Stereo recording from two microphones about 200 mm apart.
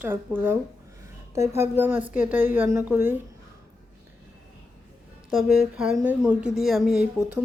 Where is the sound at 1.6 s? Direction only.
10° right (ahead or behind).